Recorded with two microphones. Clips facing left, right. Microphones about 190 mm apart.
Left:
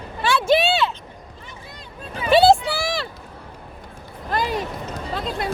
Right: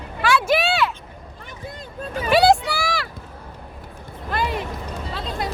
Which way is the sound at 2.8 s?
25° left (ahead or behind).